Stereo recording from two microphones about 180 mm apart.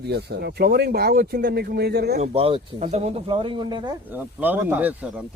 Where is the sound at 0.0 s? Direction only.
65° right (ahead or behind).